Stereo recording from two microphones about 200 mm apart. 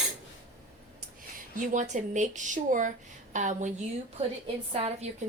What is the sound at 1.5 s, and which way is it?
A woman's voice, 40° right (ahead or behind).